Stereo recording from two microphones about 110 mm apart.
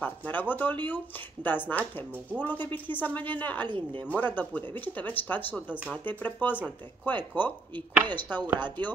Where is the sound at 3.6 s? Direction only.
45° right (ahead or behind).